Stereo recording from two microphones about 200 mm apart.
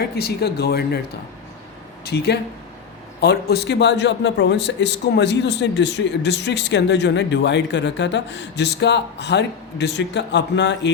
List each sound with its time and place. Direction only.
0.2 s speech: 55° left (ahead or behind)
2.0 s a man's voice: 55° left (ahead or behind)